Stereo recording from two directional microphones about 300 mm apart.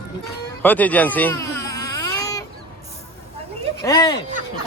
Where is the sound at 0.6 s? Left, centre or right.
Centre.